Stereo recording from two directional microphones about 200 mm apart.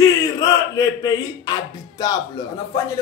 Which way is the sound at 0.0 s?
15° left (ahead or behind).